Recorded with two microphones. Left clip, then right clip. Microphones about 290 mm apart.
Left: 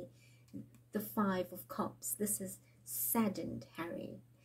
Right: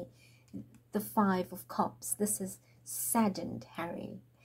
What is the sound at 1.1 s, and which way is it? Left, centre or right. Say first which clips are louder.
A woman's voice: right 6 dB; right.